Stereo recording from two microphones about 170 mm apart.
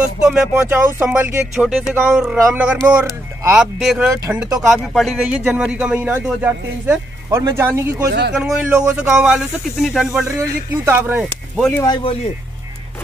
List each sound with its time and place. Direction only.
0.3 s speech: 10° right (ahead or behind)
11.7 s speech: 25° left (ahead or behind)